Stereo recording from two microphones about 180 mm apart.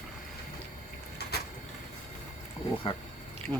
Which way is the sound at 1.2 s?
65° left (ahead or behind).